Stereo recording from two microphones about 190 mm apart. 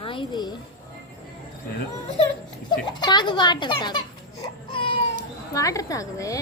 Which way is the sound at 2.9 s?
25° left (ahead or behind).